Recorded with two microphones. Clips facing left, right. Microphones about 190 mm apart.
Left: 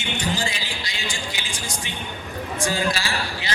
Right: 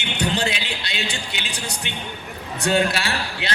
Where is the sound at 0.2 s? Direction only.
65° right (ahead or behind).